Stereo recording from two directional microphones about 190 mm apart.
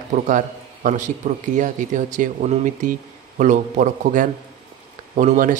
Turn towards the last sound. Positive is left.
turn(degrees=-45)  # may be behind; listen again after turning